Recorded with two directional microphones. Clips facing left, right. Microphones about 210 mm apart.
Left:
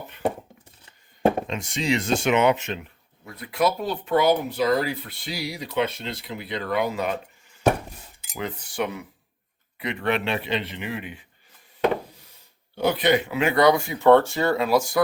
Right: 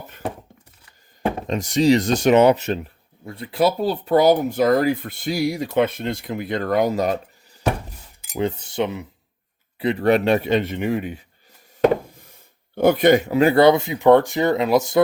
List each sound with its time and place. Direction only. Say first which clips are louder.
1.5 s speech: right 9 dB; 40° right (ahead or behind)
8.4 s speech: right 6 dB; 25° right (ahead or behind)
9.7 s speech: right 8 dB; 35° right (ahead or behind)
12.7 s speech: right 6 dB; 50° right (ahead or behind); by 15.0 s 20° right (ahead or behind)